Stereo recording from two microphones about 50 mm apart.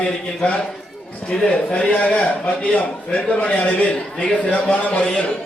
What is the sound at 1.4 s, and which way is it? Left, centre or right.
A man's voice, centre.